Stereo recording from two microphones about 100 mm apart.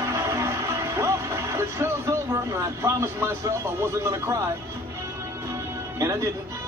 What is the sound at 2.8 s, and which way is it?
Speech, 25° right (ahead or behind).